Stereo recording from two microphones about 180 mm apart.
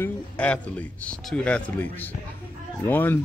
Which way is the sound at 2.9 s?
10° left (ahead or behind).